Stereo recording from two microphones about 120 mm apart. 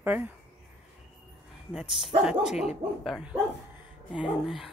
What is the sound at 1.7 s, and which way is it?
Speech, 5° right (ahead or behind).